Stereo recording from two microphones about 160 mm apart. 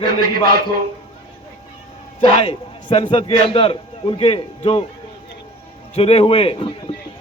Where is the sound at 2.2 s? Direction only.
35° left (ahead or behind).